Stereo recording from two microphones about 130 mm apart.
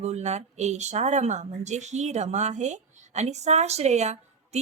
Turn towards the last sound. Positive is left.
turn(degrees=-60)  # may be behind; listen again after turning